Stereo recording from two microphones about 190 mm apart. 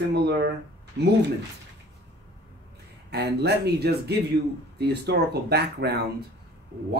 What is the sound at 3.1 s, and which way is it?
Speech, 60° right (ahead or behind).